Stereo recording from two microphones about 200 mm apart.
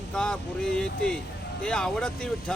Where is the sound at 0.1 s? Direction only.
5° left (ahead or behind).